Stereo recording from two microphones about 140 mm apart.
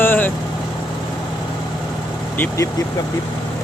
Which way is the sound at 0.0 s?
15° left (ahead or behind).